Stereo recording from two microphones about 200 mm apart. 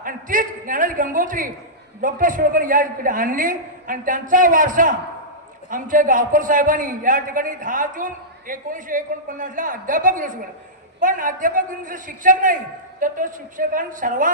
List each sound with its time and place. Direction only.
0.0 s a man's voice: 40° right (ahead or behind)